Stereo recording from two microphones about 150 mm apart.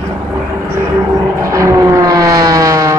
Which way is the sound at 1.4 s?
20° right (ahead or behind).